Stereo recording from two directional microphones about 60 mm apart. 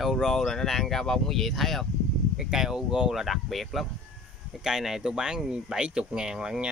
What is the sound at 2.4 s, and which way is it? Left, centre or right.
Speech, centre.